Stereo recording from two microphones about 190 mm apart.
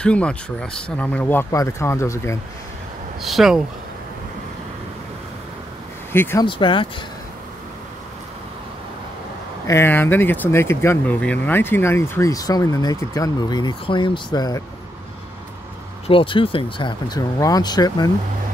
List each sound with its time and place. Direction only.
0.0 s speech: 5° left (ahead or behind)
3.2 s speech: centre (ahead or behind)
6.1 s speech: 10° left (ahead or behind)
6.4 s speech: 25° left (ahead or behind)
9.7 s speech: 10° left (ahead or behind)
16.1 s speech: 25° left (ahead or behind)